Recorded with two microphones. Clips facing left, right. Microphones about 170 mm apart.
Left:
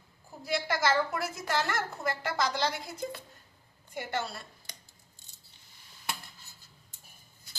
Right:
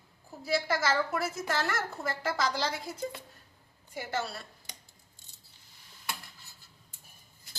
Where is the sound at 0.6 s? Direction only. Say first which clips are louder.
Left 1 dB; centre (ahead or behind).